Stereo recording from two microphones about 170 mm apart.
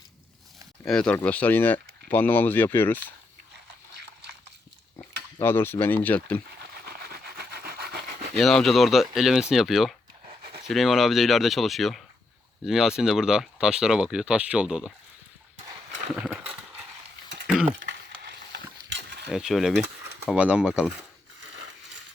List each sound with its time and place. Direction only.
0.9 s speech: 5° left (ahead or behind)
5.4 s speech: 15° left (ahead or behind)
6.6 s rub: 70° right (ahead or behind)
8.4 s speech: centre (ahead or behind)
17.4 s a sound: centre (ahead or behind)
17.8 s mechanisms: 85° right
19.3 s speech: centre (ahead or behind)